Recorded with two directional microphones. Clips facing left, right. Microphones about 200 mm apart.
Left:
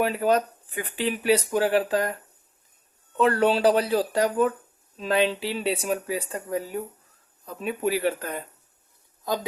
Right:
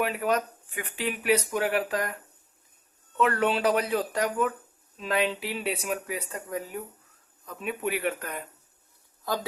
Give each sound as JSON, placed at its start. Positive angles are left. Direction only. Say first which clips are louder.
{"t": 0.0, "sound": "speech", "louder": "left 4 dB", "side_deg": 30}
{"t": 3.2, "sound": "speech", "louder": "left 4 dB", "side_deg": 30}
{"t": 9.3, "sound": "speech", "louder": "left 3 dB", "side_deg": 20}